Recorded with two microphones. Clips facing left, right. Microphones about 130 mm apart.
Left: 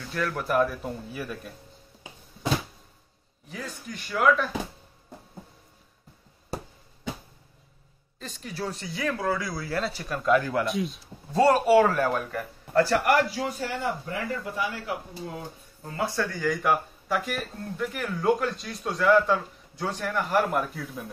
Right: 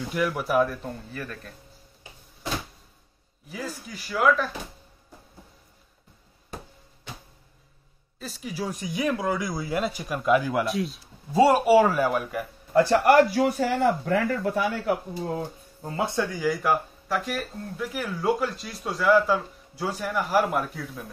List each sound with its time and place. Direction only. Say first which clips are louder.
0.1 s speech: right 2 dB; 15° right (ahead or behind); by 1.5 s 10° left (ahead or behind)
3.4 s speech: right 2 dB; 5° right (ahead or behind)
8.2 s speech: right 2 dB; 5° right (ahead or behind)
13.3 s speech: right 7 dB; 60° right (ahead or behind)
14.9 s speech: right 7 dB; 40° right (ahead or behind)
15.8 s speech: right 2 dB; 25° right (ahead or behind); by 20.9 s centre (ahead or behind)